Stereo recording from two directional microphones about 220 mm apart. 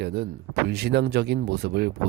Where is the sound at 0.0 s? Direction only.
50° right (ahead or behind).